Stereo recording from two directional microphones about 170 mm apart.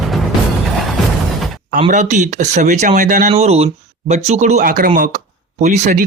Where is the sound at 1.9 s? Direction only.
45° right (ahead or behind).